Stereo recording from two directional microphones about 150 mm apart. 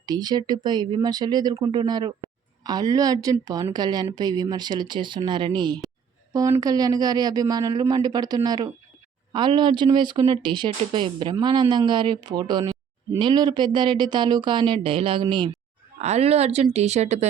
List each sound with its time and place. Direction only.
0.0 s a woman's voice: 25° right (ahead or behind)
16.0 s speech: 45° right (ahead or behind)